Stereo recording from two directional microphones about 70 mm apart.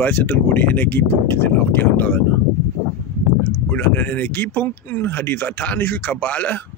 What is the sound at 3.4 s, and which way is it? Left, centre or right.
Speech, left.